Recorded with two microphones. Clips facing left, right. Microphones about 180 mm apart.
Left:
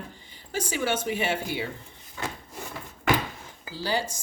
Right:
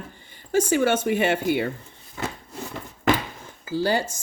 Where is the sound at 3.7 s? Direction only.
55° right (ahead or behind).